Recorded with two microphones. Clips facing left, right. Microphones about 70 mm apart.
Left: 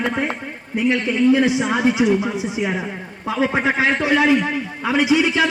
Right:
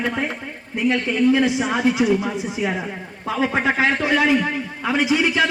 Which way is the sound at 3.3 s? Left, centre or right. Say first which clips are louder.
Left 1 dB; centre.